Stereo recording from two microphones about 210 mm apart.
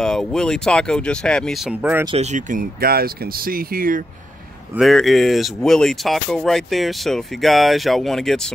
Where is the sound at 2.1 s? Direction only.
30° right (ahead or behind).